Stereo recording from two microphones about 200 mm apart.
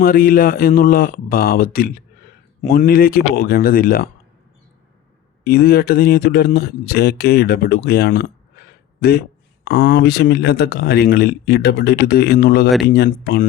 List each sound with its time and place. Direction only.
0.0 s speech: 45° left (ahead or behind)
5.4 s speech: 50° left (ahead or behind)